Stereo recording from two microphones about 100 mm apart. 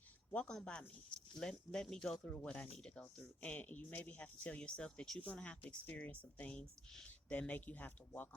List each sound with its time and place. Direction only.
0.3 s speech: 10° left (ahead or behind)